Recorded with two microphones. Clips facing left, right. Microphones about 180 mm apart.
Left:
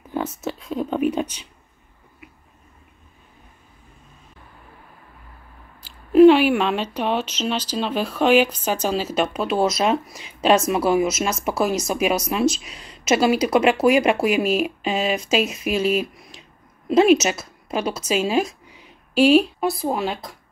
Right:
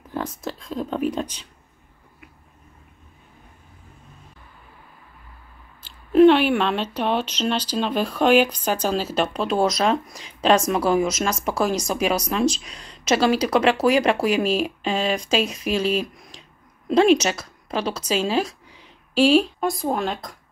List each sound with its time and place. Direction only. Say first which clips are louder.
0.4 s speech: left 3 dB; 5° left (ahead or behind)
6.1 s speech: left 2 dB; 5° left (ahead or behind)